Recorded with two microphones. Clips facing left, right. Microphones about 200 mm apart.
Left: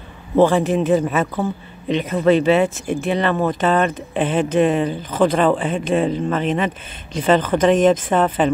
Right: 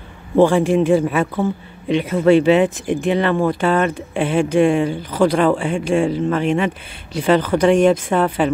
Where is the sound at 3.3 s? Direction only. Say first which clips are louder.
Right 2 dB; 15° left (ahead or behind).